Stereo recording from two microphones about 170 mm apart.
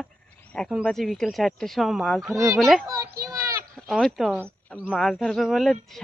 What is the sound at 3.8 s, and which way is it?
Speech, centre (ahead or behind).